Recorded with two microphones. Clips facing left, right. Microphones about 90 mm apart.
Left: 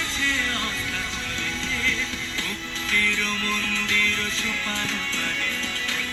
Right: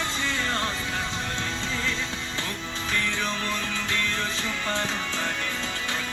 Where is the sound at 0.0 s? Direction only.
20° right (ahead or behind).